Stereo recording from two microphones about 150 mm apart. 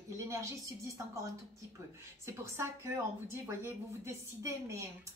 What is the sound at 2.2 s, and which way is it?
A woman's voice, 15° right (ahead or behind).